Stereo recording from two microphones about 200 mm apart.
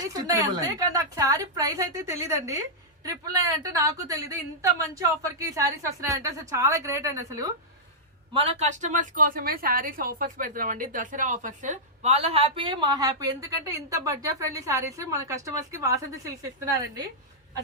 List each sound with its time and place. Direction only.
0.0 s a woman's voice: 15° right (ahead or behind)
8.3 s a woman's voice: 30° right (ahead or behind)